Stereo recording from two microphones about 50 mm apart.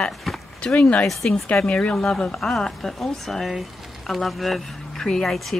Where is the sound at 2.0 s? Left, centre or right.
Centre.